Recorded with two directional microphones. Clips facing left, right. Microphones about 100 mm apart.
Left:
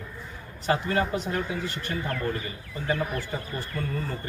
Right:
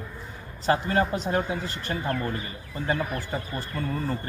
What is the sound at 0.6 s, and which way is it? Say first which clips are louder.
A man's voice: right 2 dB; 35° right (ahead or behind).